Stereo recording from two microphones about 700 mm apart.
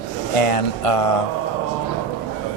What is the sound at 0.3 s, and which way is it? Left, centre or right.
Speech, left.